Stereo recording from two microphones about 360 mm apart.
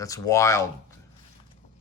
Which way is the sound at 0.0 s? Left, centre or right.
Centre.